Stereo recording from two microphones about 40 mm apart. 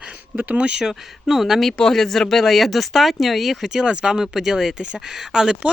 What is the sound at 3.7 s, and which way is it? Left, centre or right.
Speech, centre.